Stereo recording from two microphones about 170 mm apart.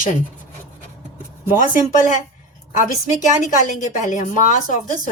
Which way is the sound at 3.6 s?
45° left (ahead or behind).